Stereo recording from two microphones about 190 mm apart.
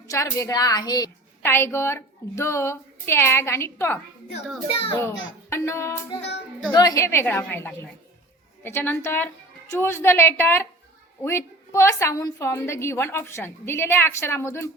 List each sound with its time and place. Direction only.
0.1 s a woman's voice: 15° left (ahead or behind)
4.7 s a woman's voice: 30° left (ahead or behind)
4.9 s a woman's voice: 10° left (ahead or behind)